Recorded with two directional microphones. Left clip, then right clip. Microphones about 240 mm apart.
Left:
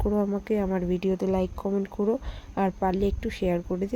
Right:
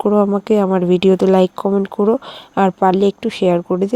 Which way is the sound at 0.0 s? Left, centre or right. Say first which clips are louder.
Right 13 dB; right.